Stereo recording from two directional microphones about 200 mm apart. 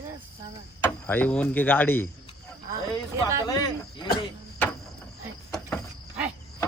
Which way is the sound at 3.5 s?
20° left (ahead or behind).